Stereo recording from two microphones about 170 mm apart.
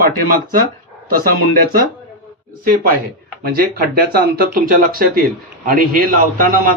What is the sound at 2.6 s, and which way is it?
A man's voice, 55° right (ahead or behind).